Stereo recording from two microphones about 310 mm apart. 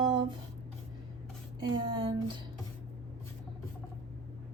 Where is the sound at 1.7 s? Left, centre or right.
Centre.